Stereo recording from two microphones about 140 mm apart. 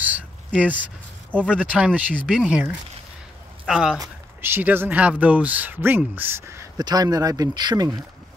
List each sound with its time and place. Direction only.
0.6 s speech: 10° right (ahead or behind)
1.4 s speech: 5° left (ahead or behind)
1.7 s speech: 10° right (ahead or behind)
4.0 s speech: 15° right (ahead or behind)